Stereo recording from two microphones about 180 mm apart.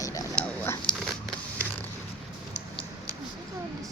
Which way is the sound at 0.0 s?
20° left (ahead or behind).